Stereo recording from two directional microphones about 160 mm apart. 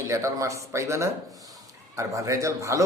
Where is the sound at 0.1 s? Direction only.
20° right (ahead or behind).